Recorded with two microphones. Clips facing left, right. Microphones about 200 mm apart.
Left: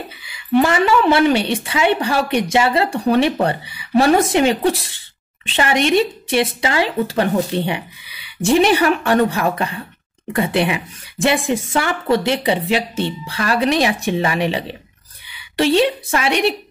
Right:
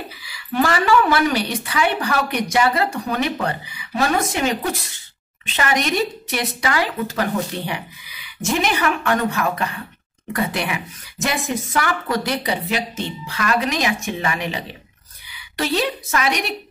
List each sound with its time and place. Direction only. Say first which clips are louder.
0.2 s a woman's voice: left 6 dB; 25° left (ahead or behind)